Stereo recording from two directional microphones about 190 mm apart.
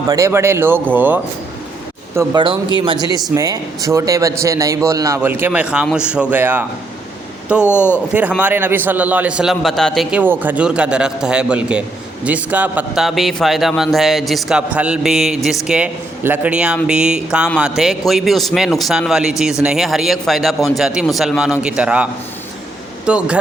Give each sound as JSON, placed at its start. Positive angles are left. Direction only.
{"t": 0.1, "sound": "a man's voice", "side_deg": -15}
{"t": 2.1, "sound": "a man's voice", "side_deg": -25}
{"t": 7.6, "sound": "speech", "side_deg": 10}
{"t": 8.1, "sound": "a man's voice", "side_deg": -5}